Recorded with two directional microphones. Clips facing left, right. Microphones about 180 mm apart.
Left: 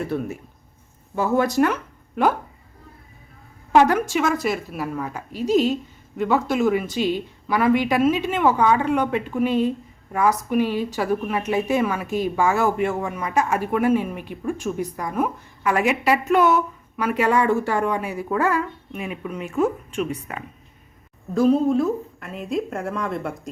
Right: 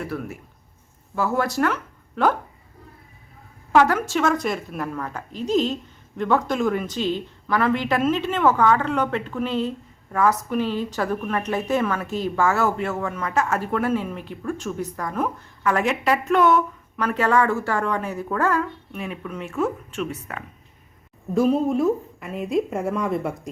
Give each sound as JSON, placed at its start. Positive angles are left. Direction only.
{"t": 0.0, "sound": "speech", "side_deg": 25}
{"t": 3.7, "sound": "speech", "side_deg": 20}
{"t": 21.3, "sound": "a woman's voice", "side_deg": -5}